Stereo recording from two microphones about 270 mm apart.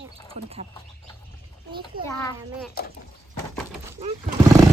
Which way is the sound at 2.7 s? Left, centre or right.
Left.